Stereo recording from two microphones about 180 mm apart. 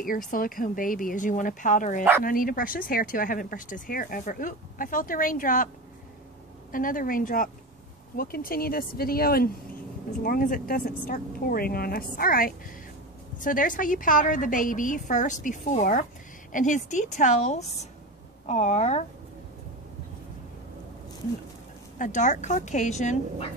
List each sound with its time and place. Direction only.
0.3 s speech: 50° left (ahead or behind)
6.7 s speech: 50° left (ahead or behind)
21.9 s speech: 45° left (ahead or behind)